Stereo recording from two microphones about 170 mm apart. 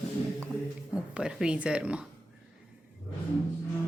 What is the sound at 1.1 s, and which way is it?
Speech, 5° right (ahead or behind).